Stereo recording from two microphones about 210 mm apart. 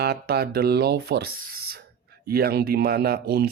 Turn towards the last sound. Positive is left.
turn(degrees=-45)  # may be behind; listen again after turning